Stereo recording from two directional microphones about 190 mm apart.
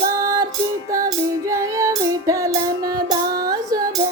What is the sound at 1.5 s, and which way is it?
Female singing, 15° right (ahead or behind).